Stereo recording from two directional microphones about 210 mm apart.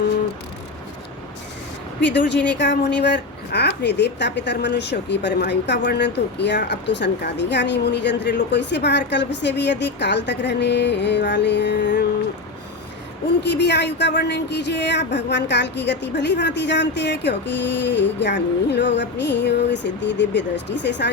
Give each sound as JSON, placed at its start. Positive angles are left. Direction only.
{"t": 2.0, "sound": "a woman's voice", "side_deg": 55}
{"t": 13.4, "sound": "a woman's voice", "side_deg": 55}